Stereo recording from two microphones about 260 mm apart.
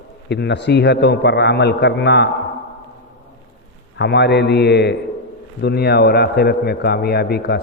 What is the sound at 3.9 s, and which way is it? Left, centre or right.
A man's voice, left.